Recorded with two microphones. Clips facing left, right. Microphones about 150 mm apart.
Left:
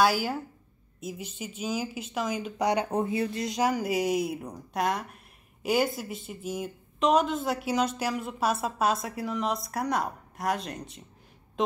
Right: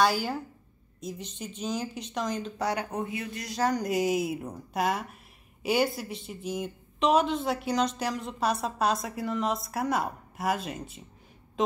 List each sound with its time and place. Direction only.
0.0 s a woman's voice: 5° left (ahead or behind)
2.6 s speech: 20° left (ahead or behind)
2.9 s speech: 30° left (ahead or behind)
3.6 s a woman's voice: 5° left (ahead or behind)